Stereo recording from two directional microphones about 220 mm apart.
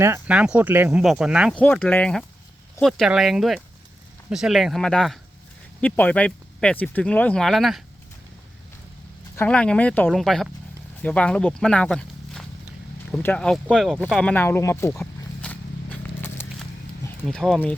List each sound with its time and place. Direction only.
0.0 s speech: 10° right (ahead or behind)
9.3 s speech: 10° left (ahead or behind)
14.0 s a sound: centre (ahead or behind)
17.2 s speech: centre (ahead or behind)